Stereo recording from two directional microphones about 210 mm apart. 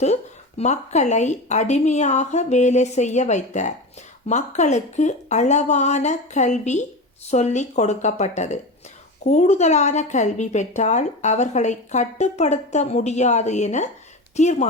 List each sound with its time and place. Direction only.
0.0 s a woman's voice: 30° left (ahead or behind)